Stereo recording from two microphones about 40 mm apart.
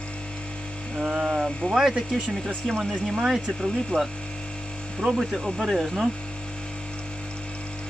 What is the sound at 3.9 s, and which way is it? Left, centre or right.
Speech, left.